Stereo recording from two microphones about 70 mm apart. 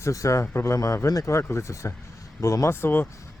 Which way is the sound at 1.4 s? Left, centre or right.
Left.